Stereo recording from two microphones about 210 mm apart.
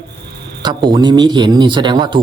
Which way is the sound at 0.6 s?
20° right (ahead or behind).